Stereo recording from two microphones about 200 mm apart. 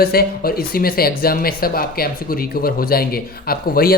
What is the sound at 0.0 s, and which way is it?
Speech, 50° left (ahead or behind).